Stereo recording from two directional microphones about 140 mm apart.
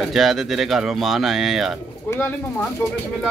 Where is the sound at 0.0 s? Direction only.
Centre (ahead or behind).